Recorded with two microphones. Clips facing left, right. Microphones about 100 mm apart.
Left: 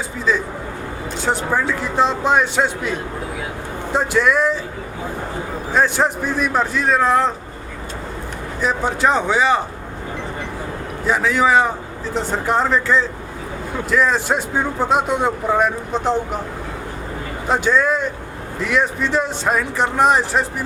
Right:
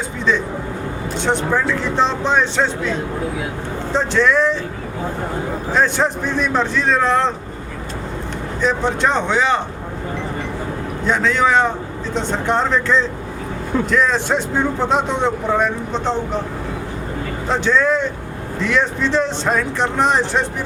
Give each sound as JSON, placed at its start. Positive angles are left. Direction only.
{"t": 1.2, "sound": "speech", "side_deg": 5}
{"t": 5.7, "sound": "speech", "side_deg": 5}
{"t": 8.6, "sound": "speech", "side_deg": 5}
{"t": 11.0, "sound": "speech", "side_deg": 5}
{"t": 17.5, "sound": "speech", "side_deg": 10}